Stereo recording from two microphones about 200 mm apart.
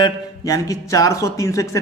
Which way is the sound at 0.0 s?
15° left (ahead or behind).